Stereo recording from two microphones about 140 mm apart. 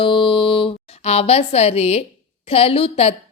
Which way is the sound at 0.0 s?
40° left (ahead or behind).